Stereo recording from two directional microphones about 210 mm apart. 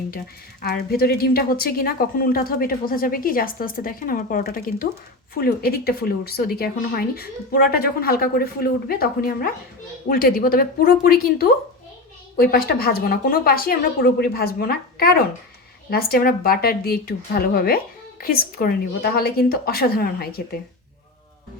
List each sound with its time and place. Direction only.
0.6 s a woman's voice: 45° left (ahead or behind)